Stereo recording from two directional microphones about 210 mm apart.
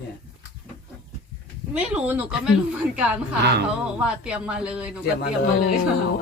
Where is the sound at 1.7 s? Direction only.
5° right (ahead or behind).